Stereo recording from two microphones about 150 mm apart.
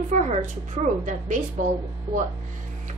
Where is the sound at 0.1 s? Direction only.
50° right (ahead or behind).